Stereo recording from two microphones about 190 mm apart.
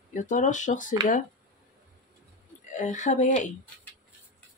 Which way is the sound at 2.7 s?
40° left (ahead or behind).